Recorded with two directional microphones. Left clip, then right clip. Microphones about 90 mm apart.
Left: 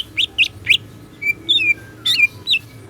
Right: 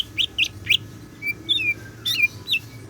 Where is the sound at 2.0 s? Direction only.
45° left (ahead or behind).